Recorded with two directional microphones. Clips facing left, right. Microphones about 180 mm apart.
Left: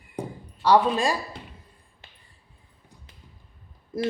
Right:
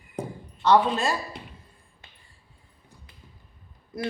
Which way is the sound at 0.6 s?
10° left (ahead or behind).